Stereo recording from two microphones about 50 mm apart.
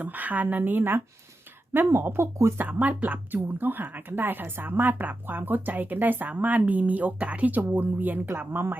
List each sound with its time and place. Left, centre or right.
0.0 s speech: right
3.0 s speech: right